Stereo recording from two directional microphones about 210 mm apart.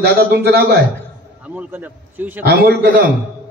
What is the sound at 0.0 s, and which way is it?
Speech, 50° right (ahead or behind).